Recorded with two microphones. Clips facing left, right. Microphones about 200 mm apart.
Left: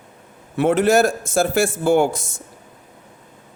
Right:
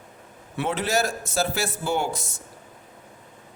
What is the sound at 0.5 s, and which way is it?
A man's voice, 50° left (ahead or behind).